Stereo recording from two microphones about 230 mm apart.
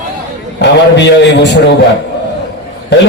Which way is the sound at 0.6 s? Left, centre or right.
Left.